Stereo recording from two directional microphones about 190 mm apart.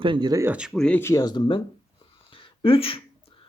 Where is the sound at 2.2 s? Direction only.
30° left (ahead or behind).